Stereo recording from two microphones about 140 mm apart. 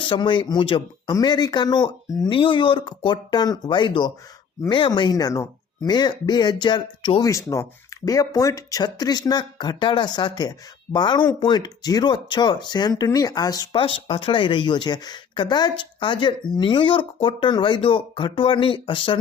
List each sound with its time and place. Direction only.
0.0 s speech: 35° left (ahead or behind)
7.3 s speech: 20° left (ahead or behind)
13.7 s speech: 40° left (ahead or behind)